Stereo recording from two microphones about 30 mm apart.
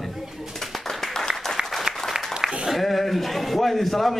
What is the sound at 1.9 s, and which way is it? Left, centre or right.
Applause, right.